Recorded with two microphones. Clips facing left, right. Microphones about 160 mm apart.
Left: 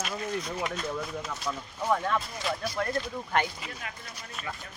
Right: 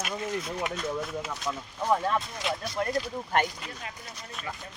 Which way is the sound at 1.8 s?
15° right (ahead or behind).